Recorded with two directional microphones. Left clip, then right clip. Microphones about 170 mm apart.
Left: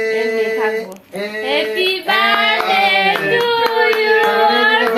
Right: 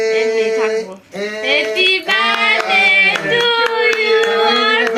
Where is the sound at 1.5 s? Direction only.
25° left (ahead or behind).